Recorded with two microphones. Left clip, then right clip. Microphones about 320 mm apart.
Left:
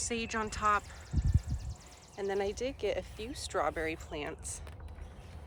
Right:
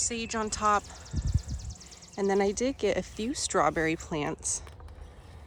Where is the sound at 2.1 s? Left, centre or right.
Centre.